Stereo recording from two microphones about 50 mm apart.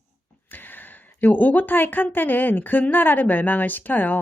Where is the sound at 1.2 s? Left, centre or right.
Left.